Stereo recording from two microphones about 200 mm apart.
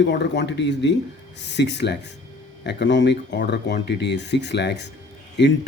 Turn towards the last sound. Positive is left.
turn(degrees=60)  # may be behind; listen again after turning